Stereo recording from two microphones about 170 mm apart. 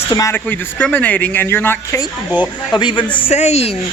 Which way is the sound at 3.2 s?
40° left (ahead or behind).